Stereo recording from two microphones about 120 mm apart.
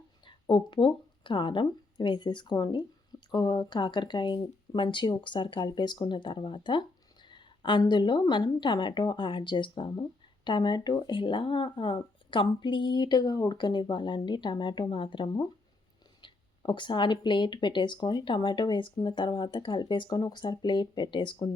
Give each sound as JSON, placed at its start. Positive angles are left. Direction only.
{"t": 0.3, "sound": "speech", "side_deg": 40}